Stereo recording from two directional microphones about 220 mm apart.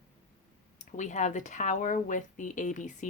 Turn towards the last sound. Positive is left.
turn(degrees=35)  # may be behind; listen again after turning